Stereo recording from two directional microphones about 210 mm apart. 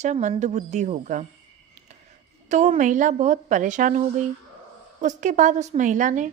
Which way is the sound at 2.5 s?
35° right (ahead or behind).